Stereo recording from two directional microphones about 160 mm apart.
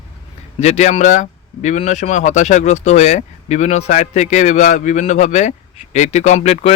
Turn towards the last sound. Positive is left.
turn(degrees=40)  # may be behind; listen again after turning